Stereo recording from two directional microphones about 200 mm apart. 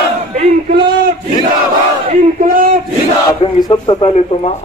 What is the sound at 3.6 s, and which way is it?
Speech, 20° left (ahead or behind).